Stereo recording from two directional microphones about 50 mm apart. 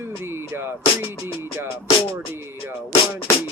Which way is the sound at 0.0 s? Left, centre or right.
Right.